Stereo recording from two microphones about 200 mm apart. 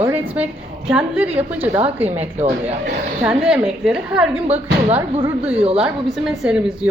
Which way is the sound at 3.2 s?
5° right (ahead or behind).